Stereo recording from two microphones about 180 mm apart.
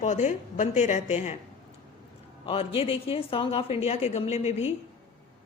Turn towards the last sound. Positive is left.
turn(degrees=35)  # may be behind; listen again after turning